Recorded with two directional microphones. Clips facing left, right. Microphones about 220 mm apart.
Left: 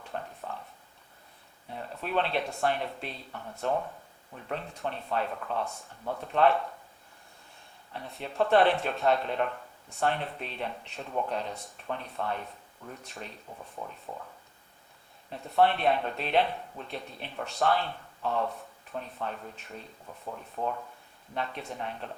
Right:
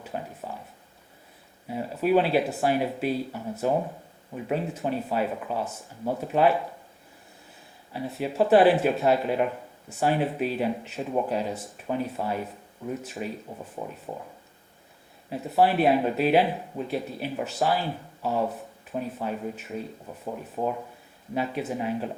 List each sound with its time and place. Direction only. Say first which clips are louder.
0.0 s a sound: right 4 dB; 10° right (ahead or behind)
1.6 s speech: right 11 dB; 5° right (ahead or behind)
7.9 s speech: right 5 dB; 5° right (ahead or behind)
13.8 s speech: right 5 dB; 20° right (ahead or behind)
15.3 s speech: right 3 dB; 5° right (ahead or behind)
20.6 s speech: right 5 dB; 25° right (ahead or behind)
21.3 s speech: right 7 dB; 5° right (ahead or behind)